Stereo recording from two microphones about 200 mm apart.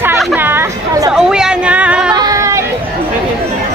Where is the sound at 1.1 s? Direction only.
5° right (ahead or behind).